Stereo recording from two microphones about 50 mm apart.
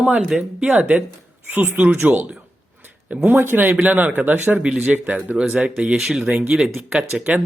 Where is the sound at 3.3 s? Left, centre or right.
Right.